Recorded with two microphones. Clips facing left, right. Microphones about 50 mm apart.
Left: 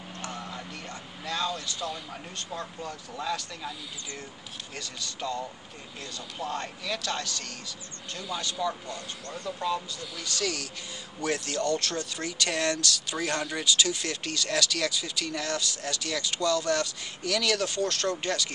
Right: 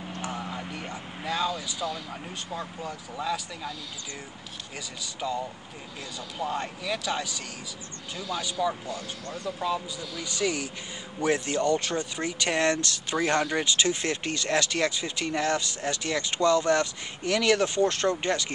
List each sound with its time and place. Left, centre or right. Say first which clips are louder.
0.2 s vehicle: right 3 dB; centre
2.0 s speech: right 2 dB; centre
4.7 s speech: right 1 dB; centre
13.7 s speech: right 1 dB; right